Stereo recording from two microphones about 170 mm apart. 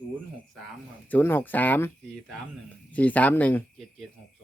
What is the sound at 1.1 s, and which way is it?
Speech, 10° left (ahead or behind).